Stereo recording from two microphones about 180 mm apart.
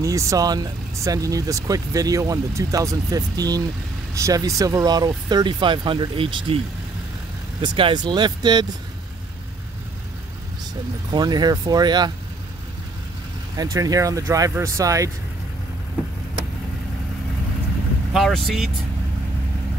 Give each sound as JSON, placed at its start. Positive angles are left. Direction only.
{"t": 0.0, "sound": "speech", "side_deg": -20}
{"t": 7.6, "sound": "speech", "side_deg": -25}
{"t": 11.1, "sound": "speech", "side_deg": -25}
{"t": 13.6, "sound": "speech", "side_deg": -20}
{"t": 18.1, "sound": "speech", "side_deg": 0}